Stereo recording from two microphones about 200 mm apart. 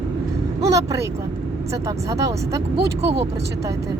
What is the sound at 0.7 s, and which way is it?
Speech, 15° right (ahead or behind).